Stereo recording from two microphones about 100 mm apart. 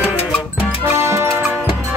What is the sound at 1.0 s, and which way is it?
Music, 30° right (ahead or behind).